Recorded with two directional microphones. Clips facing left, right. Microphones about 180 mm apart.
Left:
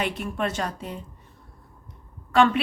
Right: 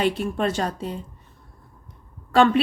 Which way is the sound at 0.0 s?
30° right (ahead or behind).